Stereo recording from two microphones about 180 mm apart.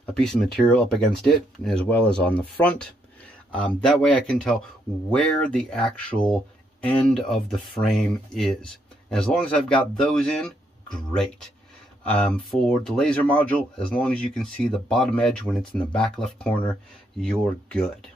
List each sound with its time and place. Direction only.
0.0 s speech: 5° left (ahead or behind)
12.0 s speech: 5° left (ahead or behind)